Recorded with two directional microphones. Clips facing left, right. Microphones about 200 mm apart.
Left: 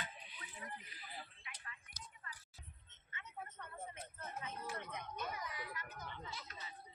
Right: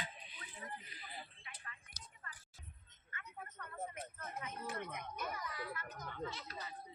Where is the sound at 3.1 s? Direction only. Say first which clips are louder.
Left 1 dB; 25° left (ahead or behind).